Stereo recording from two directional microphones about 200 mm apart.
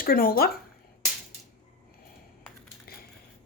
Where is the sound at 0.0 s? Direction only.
45° left (ahead or behind).